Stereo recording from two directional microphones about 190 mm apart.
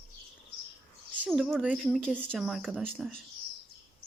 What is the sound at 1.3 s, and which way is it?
A woman's voice, centre (ahead or behind).